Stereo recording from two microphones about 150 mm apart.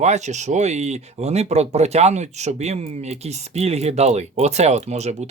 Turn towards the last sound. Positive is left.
turn(degrees=-50)  # may be behind; listen again after turning